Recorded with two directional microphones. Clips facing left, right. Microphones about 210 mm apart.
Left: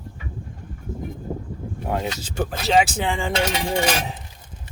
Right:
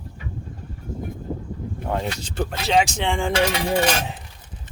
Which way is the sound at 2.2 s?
5° left (ahead or behind).